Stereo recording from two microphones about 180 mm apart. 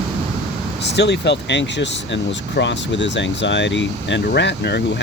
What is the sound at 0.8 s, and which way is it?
Speech, 75° left (ahead or behind).